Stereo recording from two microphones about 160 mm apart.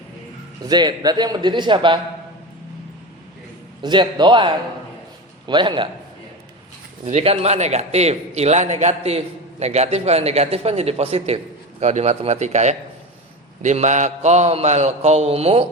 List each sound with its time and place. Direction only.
0.7 s a man's voice: 25° right (ahead or behind)
3.8 s a man's voice: 30° right (ahead or behind)
7.0 s a man's voice: 40° right (ahead or behind)
11.8 s mantra: 45° right (ahead or behind)